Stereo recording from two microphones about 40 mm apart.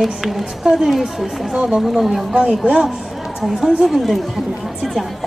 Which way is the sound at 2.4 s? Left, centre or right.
Right.